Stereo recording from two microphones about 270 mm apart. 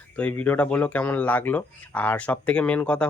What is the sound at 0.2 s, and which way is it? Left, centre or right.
Speech, centre.